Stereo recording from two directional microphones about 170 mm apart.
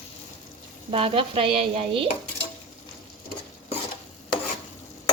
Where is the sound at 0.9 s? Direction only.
30° right (ahead or behind).